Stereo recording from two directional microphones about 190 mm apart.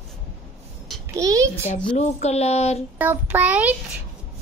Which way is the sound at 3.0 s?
10° right (ahead or behind).